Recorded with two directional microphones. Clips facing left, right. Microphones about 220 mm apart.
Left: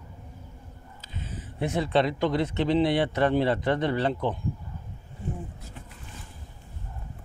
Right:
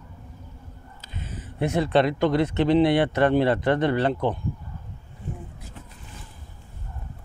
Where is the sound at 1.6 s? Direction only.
65° right (ahead or behind).